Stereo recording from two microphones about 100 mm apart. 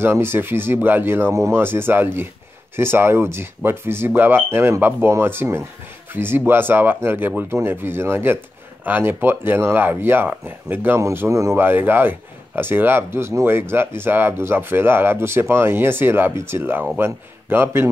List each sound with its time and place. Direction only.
0.0 s speech: 25° right (ahead or behind)